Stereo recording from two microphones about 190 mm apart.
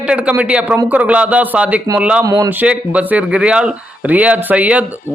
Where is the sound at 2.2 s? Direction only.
20° right (ahead or behind).